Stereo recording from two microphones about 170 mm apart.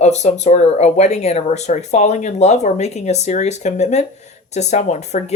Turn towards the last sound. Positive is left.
turn(degrees=40)  # may be behind; listen again after turning